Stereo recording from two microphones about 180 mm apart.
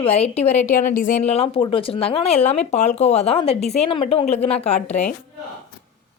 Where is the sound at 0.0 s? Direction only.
35° left (ahead or behind).